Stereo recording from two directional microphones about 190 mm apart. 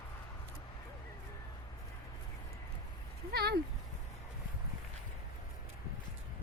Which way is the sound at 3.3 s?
55° right (ahead or behind).